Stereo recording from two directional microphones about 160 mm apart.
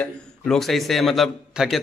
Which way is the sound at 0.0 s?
5° left (ahead or behind).